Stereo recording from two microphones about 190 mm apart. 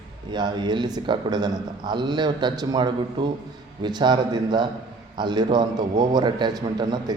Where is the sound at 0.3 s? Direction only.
25° right (ahead or behind).